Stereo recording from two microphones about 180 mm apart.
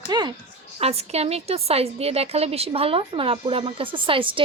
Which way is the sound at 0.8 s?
35° right (ahead or behind).